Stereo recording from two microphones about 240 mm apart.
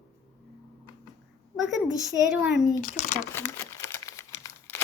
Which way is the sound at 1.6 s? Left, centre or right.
Centre.